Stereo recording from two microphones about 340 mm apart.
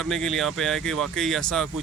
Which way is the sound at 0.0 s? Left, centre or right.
Centre.